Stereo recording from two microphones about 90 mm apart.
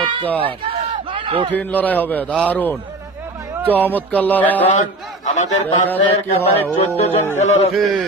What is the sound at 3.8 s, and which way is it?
Music, 20° left (ahead or behind).